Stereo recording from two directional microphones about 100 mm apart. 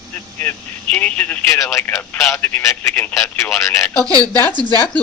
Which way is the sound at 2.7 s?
20° left (ahead or behind).